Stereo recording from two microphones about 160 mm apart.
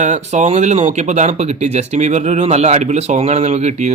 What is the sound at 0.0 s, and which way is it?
Speech, 50° right (ahead or behind).